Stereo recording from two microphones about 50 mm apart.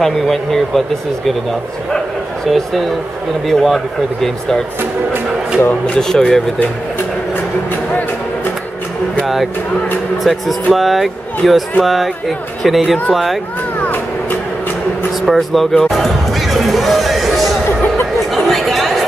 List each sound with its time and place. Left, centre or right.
0.0 s speech: centre
2.4 s speech: centre
5.9 s speech: centre
9.2 s speech: centre
13.7 s a sound: left
15.2 s speech: centre
15.8 s music: centre
18.3 s chatter: centre